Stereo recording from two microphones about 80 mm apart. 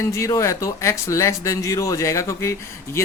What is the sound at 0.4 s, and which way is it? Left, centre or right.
Speech, left.